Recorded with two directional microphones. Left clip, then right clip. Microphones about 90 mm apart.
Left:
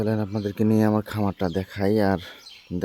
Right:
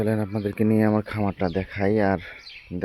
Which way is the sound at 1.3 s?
25° left (ahead or behind).